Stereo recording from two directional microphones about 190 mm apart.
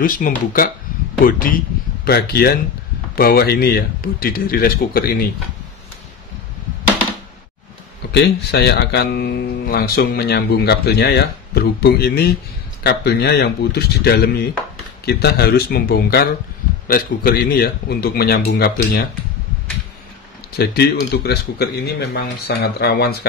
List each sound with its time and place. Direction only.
0.0 s a man's voice: 50° left (ahead or behind)
8.1 s a man's voice: 60° left (ahead or behind)
20.5 s speech: 55° left (ahead or behind)